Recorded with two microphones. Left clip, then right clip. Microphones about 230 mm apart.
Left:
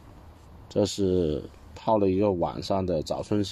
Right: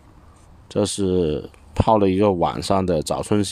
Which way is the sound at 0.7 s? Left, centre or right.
Right.